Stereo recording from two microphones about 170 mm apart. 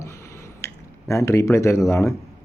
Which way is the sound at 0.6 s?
15° left (ahead or behind).